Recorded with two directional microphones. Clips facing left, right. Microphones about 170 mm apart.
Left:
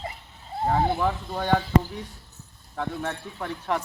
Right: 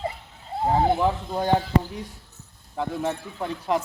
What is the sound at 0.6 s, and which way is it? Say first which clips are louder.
Speech: right 3 dB; 20° right (ahead or behind).